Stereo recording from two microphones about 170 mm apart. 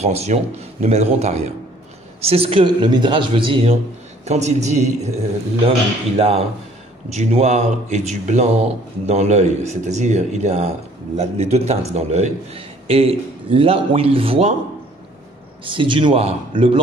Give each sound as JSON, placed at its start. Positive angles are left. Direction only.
{"t": 0.0, "sound": "a man's voice", "side_deg": -40}
{"t": 4.2, "sound": "speech", "side_deg": -40}
{"t": 15.6, "sound": "speech", "side_deg": -30}